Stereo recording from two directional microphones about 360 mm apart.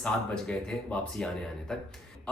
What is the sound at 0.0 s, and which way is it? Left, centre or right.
Speech, centre.